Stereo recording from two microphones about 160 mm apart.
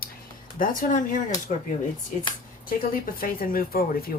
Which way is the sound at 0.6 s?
55° left (ahead or behind).